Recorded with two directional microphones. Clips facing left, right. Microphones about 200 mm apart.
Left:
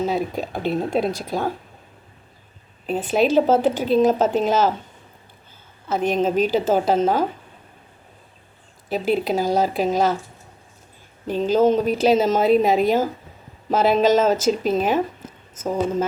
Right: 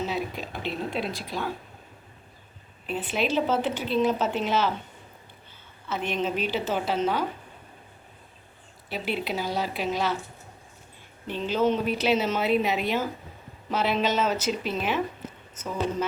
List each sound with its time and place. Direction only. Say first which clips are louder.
0.0 s speech: left 7 dB; 45° left (ahead or behind)
2.8 s speech: left 8 dB; 40° left (ahead or behind)
5.9 s speech: left 8 dB; 45° left (ahead or behind)
8.9 s speech: left 9 dB; 40° left (ahead or behind)
11.3 s speech: left 7 dB; 40° left (ahead or behind)